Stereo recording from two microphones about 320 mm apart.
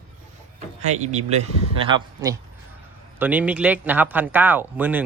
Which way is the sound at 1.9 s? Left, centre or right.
Centre.